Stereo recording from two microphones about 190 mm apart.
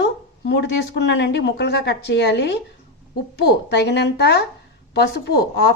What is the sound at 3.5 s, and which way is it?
Speech, 60° left (ahead or behind).